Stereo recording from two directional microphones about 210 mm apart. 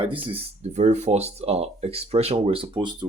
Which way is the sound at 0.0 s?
25° right (ahead or behind).